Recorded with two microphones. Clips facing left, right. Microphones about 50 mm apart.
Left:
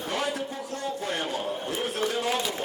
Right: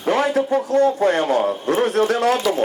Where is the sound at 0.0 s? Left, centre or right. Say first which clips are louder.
Right 11 dB; right.